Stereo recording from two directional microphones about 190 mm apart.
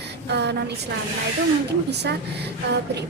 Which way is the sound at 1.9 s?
60° right (ahead or behind).